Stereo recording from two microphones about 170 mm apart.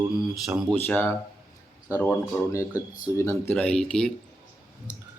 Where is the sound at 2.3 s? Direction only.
10° left (ahead or behind).